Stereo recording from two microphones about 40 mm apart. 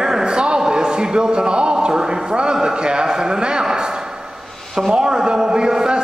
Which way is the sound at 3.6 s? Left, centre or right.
Centre.